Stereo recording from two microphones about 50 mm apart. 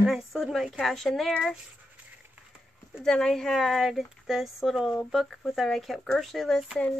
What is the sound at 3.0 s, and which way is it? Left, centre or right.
Speech, centre.